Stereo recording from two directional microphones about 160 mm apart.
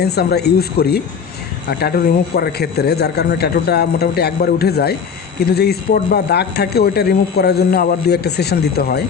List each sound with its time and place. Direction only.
0.0 s speech: 90° left